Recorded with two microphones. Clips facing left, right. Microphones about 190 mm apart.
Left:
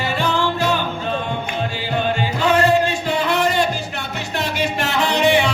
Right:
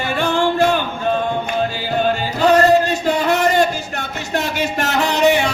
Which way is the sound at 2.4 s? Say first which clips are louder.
Right 4 dB; 40° right (ahead or behind).